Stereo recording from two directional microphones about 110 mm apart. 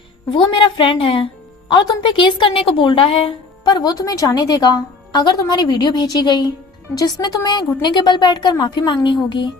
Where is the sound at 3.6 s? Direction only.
35° left (ahead or behind).